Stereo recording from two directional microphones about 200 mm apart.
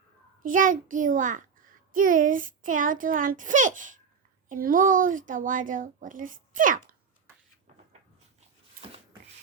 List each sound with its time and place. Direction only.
0.4 s a woman's voice: 40° right (ahead or behind)